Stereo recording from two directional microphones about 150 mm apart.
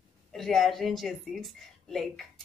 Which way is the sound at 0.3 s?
Centre (ahead or behind).